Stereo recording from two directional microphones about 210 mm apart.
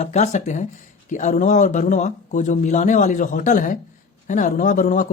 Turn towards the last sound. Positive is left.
turn(degrees=40)  # may be behind; listen again after turning